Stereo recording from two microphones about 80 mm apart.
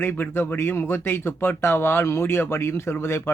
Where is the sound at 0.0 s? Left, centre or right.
Left.